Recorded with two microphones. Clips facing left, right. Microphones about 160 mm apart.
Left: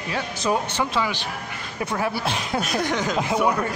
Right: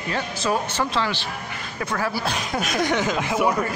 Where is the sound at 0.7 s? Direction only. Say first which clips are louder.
Even; 10° left (ahead or behind).